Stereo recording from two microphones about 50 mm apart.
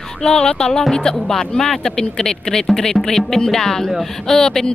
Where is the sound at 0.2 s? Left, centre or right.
Centre.